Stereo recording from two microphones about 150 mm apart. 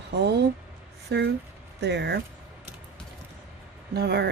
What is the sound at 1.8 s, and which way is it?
Speech, 90° right.